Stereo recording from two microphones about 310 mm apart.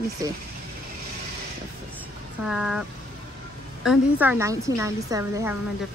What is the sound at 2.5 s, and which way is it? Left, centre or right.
Speech, centre.